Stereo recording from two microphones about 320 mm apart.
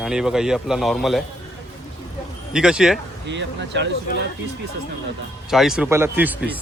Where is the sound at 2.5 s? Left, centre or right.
Centre.